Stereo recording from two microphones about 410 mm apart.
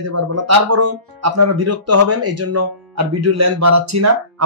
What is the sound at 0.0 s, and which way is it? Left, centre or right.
Speech, right.